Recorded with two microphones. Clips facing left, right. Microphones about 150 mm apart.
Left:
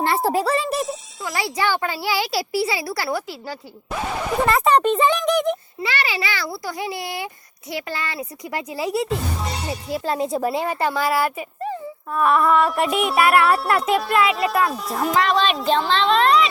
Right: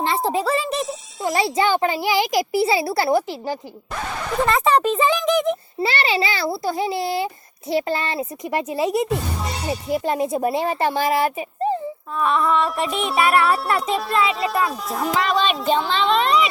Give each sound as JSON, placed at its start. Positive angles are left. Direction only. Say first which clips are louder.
{"t": 0.4, "sound": "music", "louder": "even", "side_deg": 0}
{"t": 1.2, "sound": "a child's voice", "louder": "right 5 dB", "side_deg": -25}
{"t": 3.9, "sound": "speech", "louder": "left 1 dB", "side_deg": 10}
{"t": 4.6, "sound": "a child's voice", "louder": "left 1 dB", "side_deg": -5}
{"t": 5.8, "sound": "a child's voice", "louder": "right 5 dB", "side_deg": -30}
{"t": 12.6, "sound": "a child's voice", "louder": "left 3 dB", "side_deg": 0}